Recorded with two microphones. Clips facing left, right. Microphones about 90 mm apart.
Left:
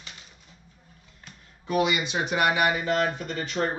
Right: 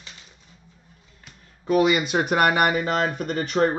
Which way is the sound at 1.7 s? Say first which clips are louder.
Right 5 dB; 40° right (ahead or behind).